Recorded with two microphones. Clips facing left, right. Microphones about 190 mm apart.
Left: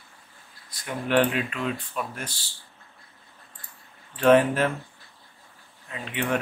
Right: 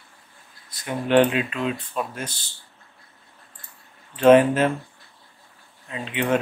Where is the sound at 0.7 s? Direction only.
20° right (ahead or behind).